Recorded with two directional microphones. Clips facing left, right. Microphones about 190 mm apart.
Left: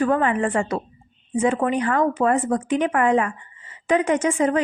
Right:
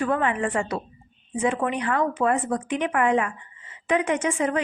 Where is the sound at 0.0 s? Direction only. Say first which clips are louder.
Left 4 dB; 40° left (ahead or behind).